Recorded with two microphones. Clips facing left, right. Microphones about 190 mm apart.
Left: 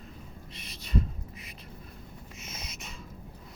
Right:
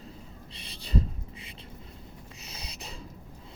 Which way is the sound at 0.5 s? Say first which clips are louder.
Right 1 dB; 30° right (ahead or behind).